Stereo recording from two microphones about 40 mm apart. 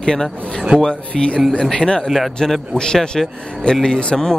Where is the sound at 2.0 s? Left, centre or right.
Centre.